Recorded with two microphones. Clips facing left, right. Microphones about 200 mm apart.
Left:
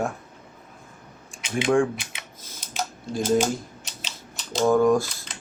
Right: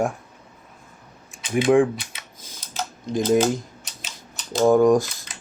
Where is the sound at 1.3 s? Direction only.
20° right (ahead or behind).